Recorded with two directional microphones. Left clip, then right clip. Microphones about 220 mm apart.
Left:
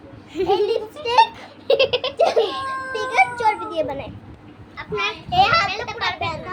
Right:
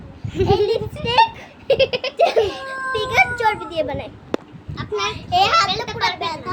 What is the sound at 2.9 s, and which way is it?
Children playing, 20° right (ahead or behind).